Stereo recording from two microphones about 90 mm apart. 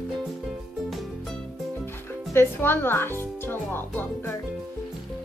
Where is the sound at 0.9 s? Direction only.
Centre (ahead or behind).